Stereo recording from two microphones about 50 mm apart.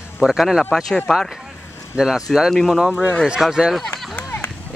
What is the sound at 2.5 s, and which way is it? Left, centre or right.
Speech, centre.